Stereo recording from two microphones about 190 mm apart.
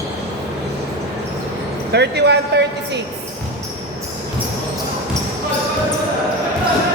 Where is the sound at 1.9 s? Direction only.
60° right (ahead or behind).